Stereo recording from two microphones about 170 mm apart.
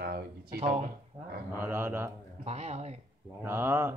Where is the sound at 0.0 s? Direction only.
65° right (ahead or behind).